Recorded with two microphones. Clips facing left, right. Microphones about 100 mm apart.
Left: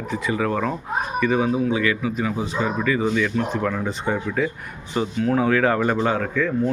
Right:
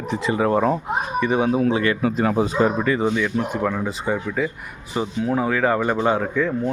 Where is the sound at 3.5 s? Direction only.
15° right (ahead or behind).